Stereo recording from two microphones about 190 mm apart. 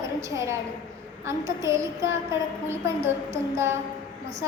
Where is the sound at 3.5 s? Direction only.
15° right (ahead or behind).